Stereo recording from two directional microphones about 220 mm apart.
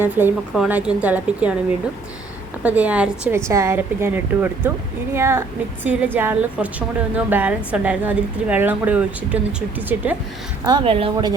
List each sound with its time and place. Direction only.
0.0 s a woman's voice: 10° right (ahead or behind)
2.6 s a woman's voice: 5° right (ahead or behind)
10.7 s a woman's voice: 20° right (ahead or behind)